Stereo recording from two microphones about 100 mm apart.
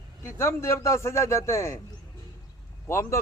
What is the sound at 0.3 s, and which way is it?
Speech, 25° left (ahead or behind).